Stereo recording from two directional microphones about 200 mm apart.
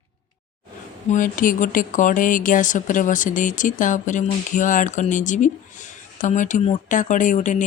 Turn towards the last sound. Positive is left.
turn(degrees=40)  # may be behind; listen again after turning